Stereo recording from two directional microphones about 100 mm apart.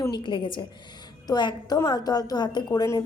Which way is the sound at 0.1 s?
55° left (ahead or behind).